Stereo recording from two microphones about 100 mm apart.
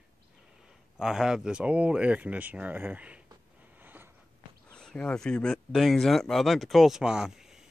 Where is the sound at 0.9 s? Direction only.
5° right (ahead or behind).